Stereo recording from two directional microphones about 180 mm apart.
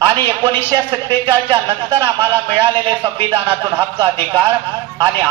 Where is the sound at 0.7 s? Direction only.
25° right (ahead or behind).